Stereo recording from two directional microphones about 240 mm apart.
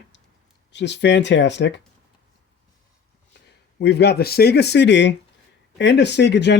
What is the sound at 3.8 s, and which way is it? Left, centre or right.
Speech, left.